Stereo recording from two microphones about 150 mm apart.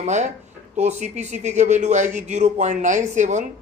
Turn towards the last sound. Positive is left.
turn(degrees=-55)  # may be behind; listen again after turning